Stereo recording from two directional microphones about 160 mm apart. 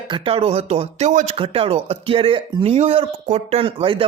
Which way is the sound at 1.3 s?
35° right (ahead or behind).